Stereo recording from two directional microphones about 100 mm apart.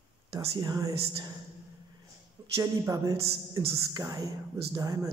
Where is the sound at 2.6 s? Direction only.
30° right (ahead or behind).